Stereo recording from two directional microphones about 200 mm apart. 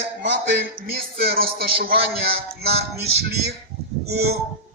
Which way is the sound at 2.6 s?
30° right (ahead or behind).